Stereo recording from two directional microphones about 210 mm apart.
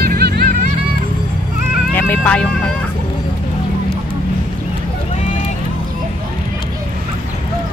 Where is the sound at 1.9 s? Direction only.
5° left (ahead or behind).